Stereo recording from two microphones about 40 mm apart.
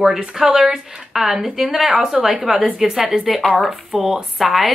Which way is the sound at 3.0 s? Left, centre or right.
Centre.